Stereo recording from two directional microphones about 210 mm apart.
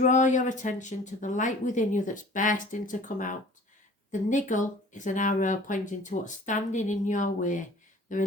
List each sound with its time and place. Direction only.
0.0 s speech: 35° left (ahead or behind)